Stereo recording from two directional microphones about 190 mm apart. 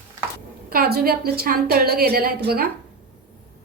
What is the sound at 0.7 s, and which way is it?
A woman's voice, 55° right (ahead or behind).